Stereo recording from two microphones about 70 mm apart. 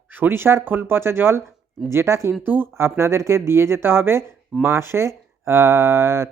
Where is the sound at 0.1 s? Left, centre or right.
Right.